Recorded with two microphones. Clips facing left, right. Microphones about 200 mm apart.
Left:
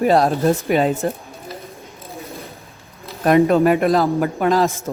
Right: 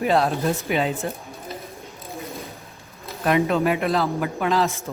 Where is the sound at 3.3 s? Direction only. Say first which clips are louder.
Left 7 dB; 45° left (ahead or behind).